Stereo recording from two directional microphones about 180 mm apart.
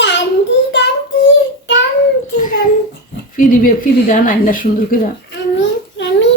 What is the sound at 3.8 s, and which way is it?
A woman's voice, 50° left (ahead or behind).